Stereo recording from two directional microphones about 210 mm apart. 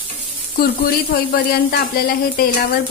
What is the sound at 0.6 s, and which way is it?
Speech, 45° left (ahead or behind).